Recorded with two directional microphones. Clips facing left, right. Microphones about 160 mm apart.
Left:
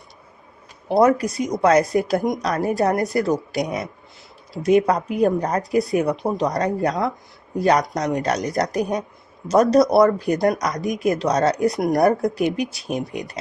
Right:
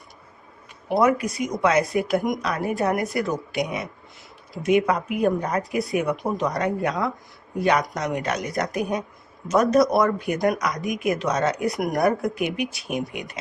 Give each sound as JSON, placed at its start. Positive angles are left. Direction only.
{"t": 0.9, "sound": "speech", "side_deg": 35}